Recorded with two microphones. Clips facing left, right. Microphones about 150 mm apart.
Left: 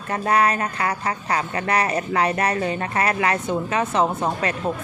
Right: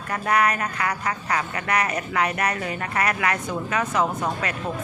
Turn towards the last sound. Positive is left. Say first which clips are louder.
# left 4 dB
turn(degrees=30)  # may be behind; listen again after turning